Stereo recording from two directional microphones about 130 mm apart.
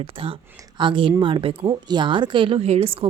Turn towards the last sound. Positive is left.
turn(degrees=-45)  # may be behind; listen again after turning